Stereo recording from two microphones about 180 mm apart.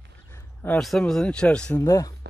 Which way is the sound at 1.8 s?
20° left (ahead or behind).